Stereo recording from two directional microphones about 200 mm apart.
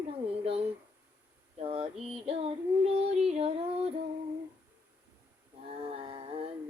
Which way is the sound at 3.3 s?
30° right (ahead or behind).